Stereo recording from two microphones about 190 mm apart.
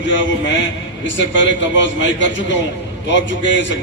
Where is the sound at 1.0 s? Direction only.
75° left (ahead or behind).